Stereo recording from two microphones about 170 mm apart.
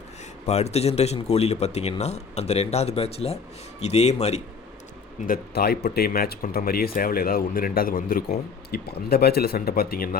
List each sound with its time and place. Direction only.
0.4 s speech: 40° left (ahead or behind)
5.2 s speech: 60° left (ahead or behind)